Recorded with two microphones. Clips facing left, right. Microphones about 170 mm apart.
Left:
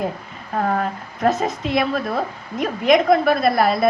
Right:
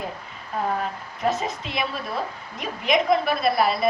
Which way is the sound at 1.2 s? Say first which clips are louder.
Left 6 dB; 45° left (ahead or behind).